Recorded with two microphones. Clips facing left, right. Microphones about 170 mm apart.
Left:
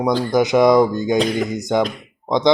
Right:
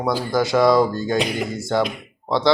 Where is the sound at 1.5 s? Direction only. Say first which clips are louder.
Left 2 dB; 20° left (ahead or behind).